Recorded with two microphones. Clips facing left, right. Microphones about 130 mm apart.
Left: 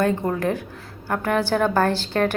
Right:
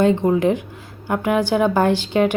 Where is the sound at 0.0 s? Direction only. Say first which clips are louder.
Right 5 dB; 20° right (ahead or behind).